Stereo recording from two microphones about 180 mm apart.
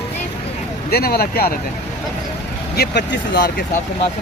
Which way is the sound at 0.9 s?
60° left (ahead or behind).